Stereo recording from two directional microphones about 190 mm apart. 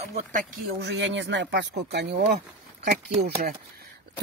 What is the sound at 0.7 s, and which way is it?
Speech, 65° right (ahead or behind).